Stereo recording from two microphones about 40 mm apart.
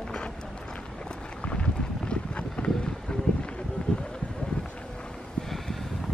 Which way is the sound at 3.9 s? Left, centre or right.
Left.